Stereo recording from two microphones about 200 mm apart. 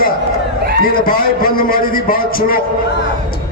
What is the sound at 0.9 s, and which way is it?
A man's voice, 45° left (ahead or behind).